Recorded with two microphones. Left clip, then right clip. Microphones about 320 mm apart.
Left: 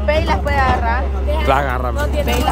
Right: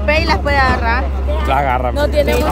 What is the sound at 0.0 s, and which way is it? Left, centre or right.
Vehicle, right.